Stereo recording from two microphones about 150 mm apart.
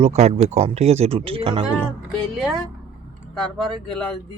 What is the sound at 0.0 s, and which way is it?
Speech, 45° right (ahead or behind).